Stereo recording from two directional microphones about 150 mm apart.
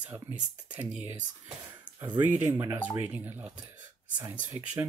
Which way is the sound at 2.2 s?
15° right (ahead or behind).